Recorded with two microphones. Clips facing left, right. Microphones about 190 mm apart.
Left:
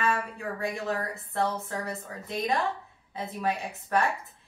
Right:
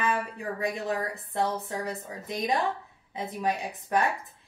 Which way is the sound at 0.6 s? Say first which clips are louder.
Right 1 dB; 15° right (ahead or behind).